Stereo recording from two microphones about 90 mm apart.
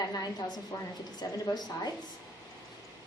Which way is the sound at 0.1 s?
45° left (ahead or behind).